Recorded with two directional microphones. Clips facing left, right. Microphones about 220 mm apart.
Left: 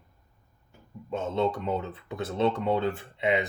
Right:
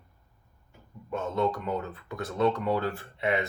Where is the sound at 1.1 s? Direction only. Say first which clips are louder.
Left 1 dB; 20° left (ahead or behind).